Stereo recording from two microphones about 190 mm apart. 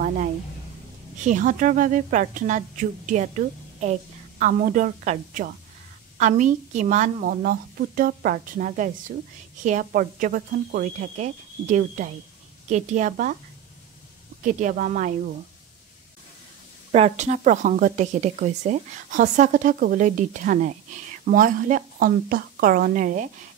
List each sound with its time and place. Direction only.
1.2 s a woman's voice: 40° right (ahead or behind)
14.4 s a woman's voice: 40° right (ahead or behind)
16.9 s a woman's voice: 35° right (ahead or behind)